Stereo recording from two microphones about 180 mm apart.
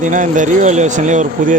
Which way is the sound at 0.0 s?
45° right (ahead or behind).